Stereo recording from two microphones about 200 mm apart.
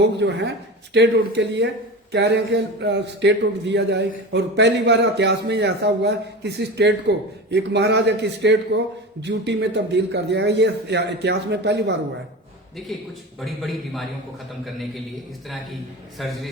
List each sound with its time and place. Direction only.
0.0 s a man's voice: 60° right (ahead or behind)
13.4 s a man's voice: centre (ahead or behind)
16.1 s a man's voice: centre (ahead or behind)